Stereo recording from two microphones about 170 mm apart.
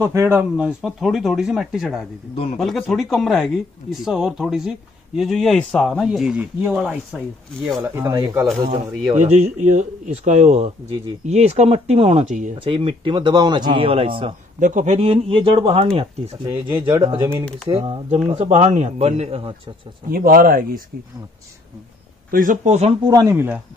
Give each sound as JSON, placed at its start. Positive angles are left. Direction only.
{"t": 0.0, "sound": "speech", "side_deg": -15}
{"t": 7.8, "sound": "speech", "side_deg": -15}
{"t": 9.1, "sound": "speech", "side_deg": -45}
{"t": 12.5, "sound": "speech", "side_deg": -30}
{"t": 14.6, "sound": "speech", "side_deg": -45}
{"t": 20.1, "sound": "speech", "side_deg": -55}
{"t": 22.3, "sound": "speech", "side_deg": -50}
{"t": 23.0, "sound": "speech", "side_deg": -25}
{"t": 23.3, "sound": "speech", "side_deg": -10}